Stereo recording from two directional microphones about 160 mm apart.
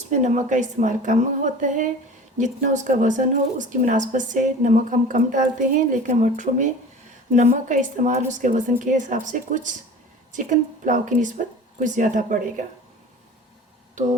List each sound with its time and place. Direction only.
0.1 s a woman's voice: 50° right (ahead or behind)